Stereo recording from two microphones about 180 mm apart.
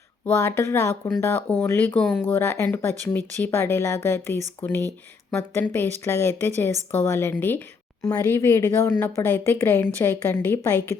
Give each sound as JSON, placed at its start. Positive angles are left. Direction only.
{"t": 0.3, "sound": "a woman's voice", "side_deg": 15}